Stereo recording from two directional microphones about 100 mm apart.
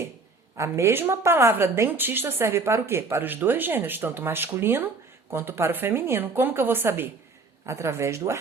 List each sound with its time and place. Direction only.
0.5 s a woman's voice: 30° right (ahead or behind)